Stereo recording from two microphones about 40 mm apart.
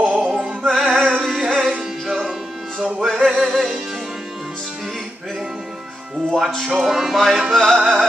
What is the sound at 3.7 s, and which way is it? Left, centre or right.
Music, centre.